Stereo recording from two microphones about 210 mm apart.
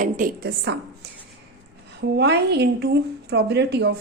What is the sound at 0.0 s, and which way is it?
Speech, 40° right (ahead or behind).